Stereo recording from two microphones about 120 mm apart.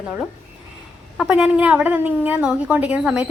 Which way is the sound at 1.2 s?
5° right (ahead or behind).